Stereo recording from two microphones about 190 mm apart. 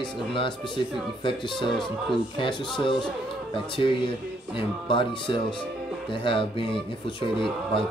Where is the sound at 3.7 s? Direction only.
25° left (ahead or behind).